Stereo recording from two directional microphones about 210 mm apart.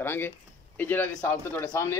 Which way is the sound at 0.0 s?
10° left (ahead or behind).